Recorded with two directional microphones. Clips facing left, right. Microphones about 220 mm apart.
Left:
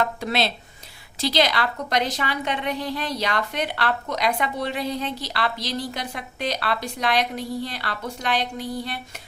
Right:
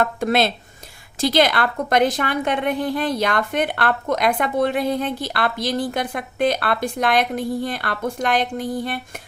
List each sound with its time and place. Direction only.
0.0 s a woman's voice: 50° right (ahead or behind)